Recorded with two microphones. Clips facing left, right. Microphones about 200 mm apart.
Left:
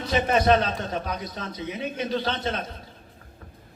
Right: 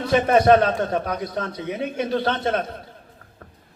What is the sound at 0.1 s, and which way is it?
A man's voice, 50° right (ahead or behind).